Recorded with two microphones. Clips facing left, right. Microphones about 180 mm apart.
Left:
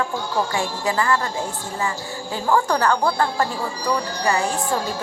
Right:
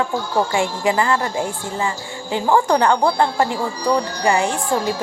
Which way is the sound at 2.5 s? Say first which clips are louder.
Right 3 dB; 20° right (ahead or behind).